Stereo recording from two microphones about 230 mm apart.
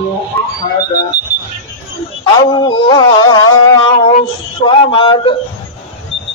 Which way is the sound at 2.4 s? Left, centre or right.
Centre.